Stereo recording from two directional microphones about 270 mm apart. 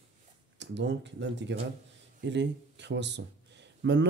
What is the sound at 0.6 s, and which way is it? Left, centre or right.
Speech, right.